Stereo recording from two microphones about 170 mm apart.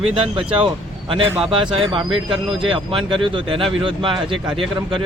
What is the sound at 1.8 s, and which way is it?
Speech, 30° right (ahead or behind).